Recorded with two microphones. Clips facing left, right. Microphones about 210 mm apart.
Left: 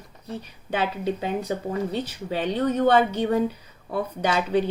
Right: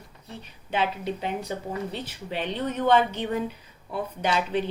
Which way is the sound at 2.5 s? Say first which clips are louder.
Left 3 dB; 40° left (ahead or behind).